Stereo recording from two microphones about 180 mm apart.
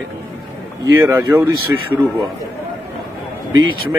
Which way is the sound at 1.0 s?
15° right (ahead or behind).